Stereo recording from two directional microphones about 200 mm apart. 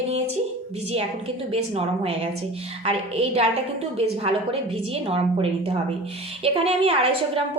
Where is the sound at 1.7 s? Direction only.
30° right (ahead or behind).